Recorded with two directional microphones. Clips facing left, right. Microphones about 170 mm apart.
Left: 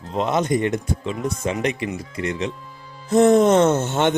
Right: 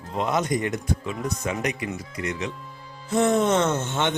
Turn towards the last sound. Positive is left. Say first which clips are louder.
# left 6 dB
turn(degrees=40)  # may be behind; listen again after turning